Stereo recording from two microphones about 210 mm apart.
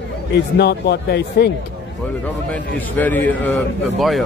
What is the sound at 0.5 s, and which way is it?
Speech, 50° left (ahead or behind).